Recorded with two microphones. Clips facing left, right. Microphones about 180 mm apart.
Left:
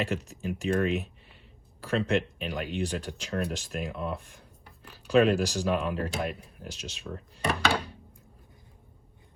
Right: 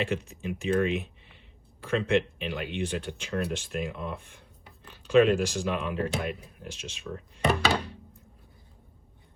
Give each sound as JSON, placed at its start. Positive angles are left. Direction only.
{"t": 0.0, "sound": "speech", "side_deg": 40}